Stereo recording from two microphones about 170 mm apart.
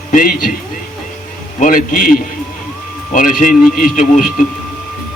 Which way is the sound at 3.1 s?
50° left (ahead or behind).